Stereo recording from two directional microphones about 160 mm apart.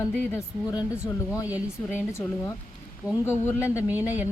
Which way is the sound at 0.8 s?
5° right (ahead or behind).